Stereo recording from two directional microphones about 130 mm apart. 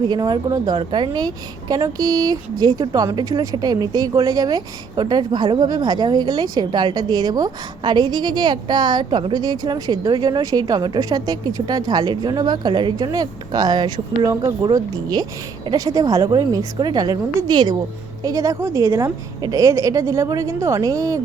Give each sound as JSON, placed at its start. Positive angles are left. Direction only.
{"t": 0.1, "sound": "a woman's voice", "side_deg": -30}